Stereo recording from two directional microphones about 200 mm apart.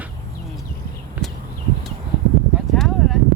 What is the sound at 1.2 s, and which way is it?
Horse, 5° right (ahead or behind).